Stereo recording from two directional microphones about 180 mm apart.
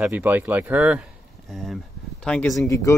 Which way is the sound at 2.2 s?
5° left (ahead or behind).